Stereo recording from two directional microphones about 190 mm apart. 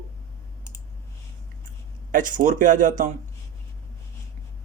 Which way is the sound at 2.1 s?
45° right (ahead or behind).